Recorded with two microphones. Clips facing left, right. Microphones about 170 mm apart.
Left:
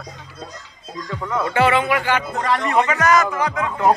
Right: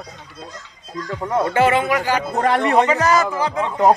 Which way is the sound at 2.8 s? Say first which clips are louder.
Left 2 dB; 30° right (ahead or behind).